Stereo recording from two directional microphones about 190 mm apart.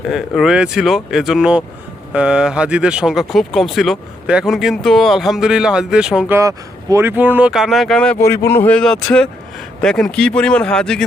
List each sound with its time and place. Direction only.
0.1 s speech: centre (ahead or behind)